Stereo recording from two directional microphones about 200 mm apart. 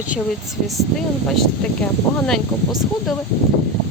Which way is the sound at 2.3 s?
Centre (ahead or behind).